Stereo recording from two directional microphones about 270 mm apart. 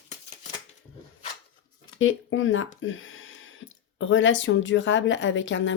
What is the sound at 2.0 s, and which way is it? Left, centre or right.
Speech, left.